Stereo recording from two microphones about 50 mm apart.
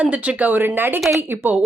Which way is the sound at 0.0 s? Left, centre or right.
Right.